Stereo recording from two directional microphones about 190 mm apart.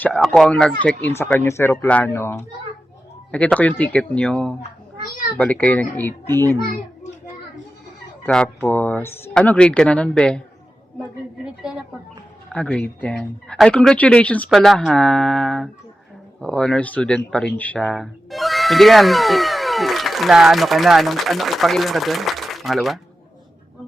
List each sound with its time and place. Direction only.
0.0 s speech: 5° left (ahead or behind)
5.0 s a child's voice: 50° left (ahead or behind)
5.4 s speech: 10° left (ahead or behind)
8.2 s speech: 5° left (ahead or behind)
11.4 s speech: 5° right (ahead or behind)